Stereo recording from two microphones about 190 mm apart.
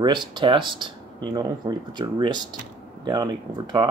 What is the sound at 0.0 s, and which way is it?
Speech, 25° right (ahead or behind).